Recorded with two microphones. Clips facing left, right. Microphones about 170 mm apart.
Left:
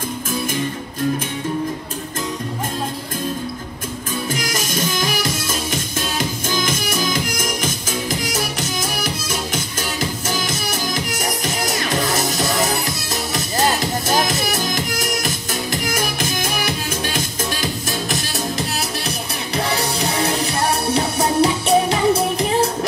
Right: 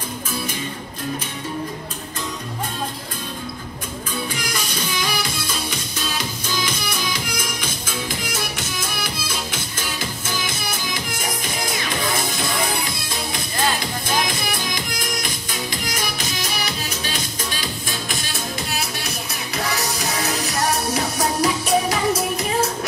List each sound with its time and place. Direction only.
4.3 s music: 45° left (ahead or behind)
11.4 s music: 45° left (ahead or behind)
19.0 s music: 30° left (ahead or behind)